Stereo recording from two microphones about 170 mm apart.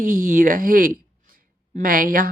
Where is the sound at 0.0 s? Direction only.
50° right (ahead or behind).